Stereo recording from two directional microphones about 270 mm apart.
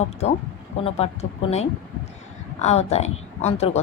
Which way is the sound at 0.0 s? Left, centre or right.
Left.